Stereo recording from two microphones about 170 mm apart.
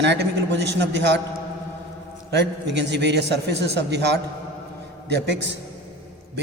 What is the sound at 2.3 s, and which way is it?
A man's voice, 90° right.